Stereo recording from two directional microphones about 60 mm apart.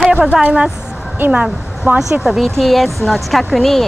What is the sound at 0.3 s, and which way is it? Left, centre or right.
A woman's voice, centre.